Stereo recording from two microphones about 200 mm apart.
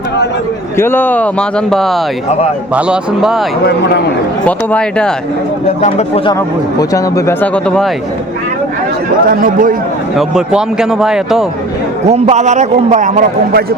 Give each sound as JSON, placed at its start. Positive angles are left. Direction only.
{"t": 0.8, "sound": "a man's voice", "side_deg": 10}
{"t": 4.4, "sound": "a man's voice", "side_deg": 5}
{"t": 5.8, "sound": "speech", "side_deg": 30}
{"t": 6.7, "sound": "speech", "side_deg": 15}
{"t": 9.3, "sound": "a man's voice", "side_deg": -45}
{"t": 10.2, "sound": "a man's voice", "side_deg": -5}
{"t": 12.0, "sound": "a man's voice", "side_deg": -30}